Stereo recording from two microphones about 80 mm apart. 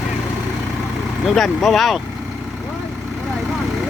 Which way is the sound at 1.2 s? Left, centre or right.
Centre.